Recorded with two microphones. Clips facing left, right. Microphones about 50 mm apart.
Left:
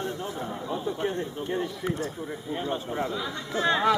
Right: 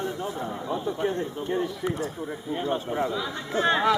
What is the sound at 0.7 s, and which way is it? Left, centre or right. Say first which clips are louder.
Speech: right 2 dB; centre.